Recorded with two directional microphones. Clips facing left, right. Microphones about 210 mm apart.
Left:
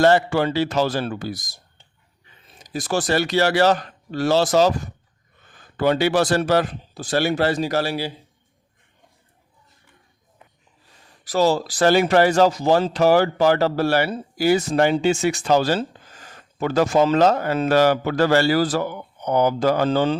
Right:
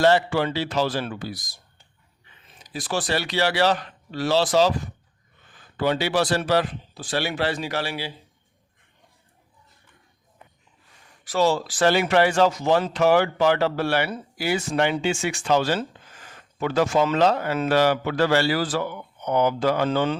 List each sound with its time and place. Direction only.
0.0 s speech: 45° left (ahead or behind)
2.6 s speech: 45° left (ahead or behind)
11.2 s speech: 40° left (ahead or behind)